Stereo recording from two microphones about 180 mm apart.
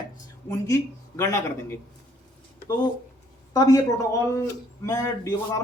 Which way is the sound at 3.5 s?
20° left (ahead or behind).